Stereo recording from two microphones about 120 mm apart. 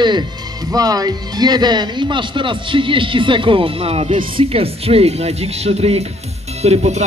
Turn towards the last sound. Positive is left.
turn(degrees=-65)  # may be behind; listen again after turning